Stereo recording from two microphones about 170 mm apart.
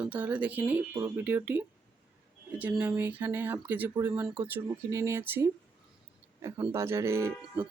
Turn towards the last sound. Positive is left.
turn(degrees=-15)  # may be behind; listen again after turning